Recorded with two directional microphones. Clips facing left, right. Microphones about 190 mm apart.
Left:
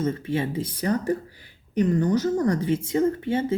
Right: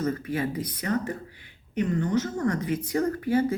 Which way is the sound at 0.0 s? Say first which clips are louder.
Left 2 dB; 25° left (ahead or behind).